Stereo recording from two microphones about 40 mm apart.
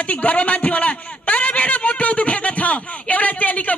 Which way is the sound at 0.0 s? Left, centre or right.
Left.